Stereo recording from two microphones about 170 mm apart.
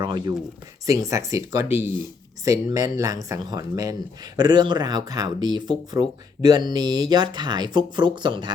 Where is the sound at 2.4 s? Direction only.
20° right (ahead or behind).